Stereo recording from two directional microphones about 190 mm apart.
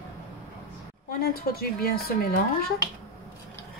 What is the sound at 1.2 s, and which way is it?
Speech, 55° left (ahead or behind).